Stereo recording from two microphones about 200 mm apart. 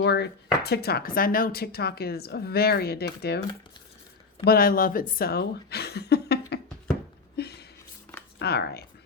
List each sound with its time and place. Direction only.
0.0 s speech: 60° left (ahead or behind)
4.4 s speech: 45° left (ahead or behind)
7.3 s a sound: 55° left (ahead or behind)
8.4 s speech: 55° left (ahead or behind)